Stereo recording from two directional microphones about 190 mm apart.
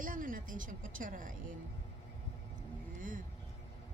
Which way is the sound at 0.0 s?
45° right (ahead or behind).